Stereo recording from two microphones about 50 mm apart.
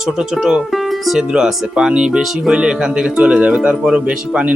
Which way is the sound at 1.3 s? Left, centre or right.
Centre.